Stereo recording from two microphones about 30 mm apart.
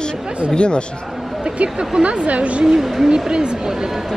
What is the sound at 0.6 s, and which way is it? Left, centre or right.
Speech, left.